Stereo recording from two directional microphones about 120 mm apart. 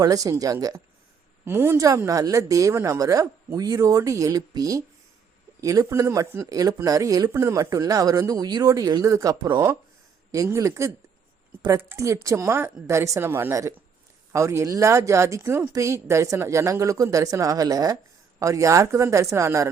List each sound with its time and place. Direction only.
0.0 s speech: 30° right (ahead or behind)